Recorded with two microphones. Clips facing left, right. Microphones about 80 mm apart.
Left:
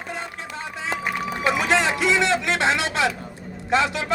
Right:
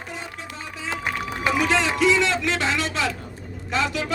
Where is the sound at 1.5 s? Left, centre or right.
Left.